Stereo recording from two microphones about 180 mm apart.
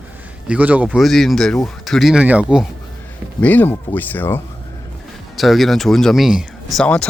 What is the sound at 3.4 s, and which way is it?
Speech, 10° left (ahead or behind).